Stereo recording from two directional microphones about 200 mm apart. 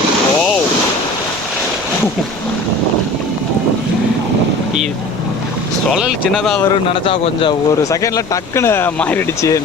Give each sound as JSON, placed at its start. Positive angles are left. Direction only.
{"t": 5.9, "sound": "speech", "side_deg": 0}
{"t": 6.9, "sound": "speech", "side_deg": 25}
{"t": 7.9, "sound": "speech", "side_deg": 15}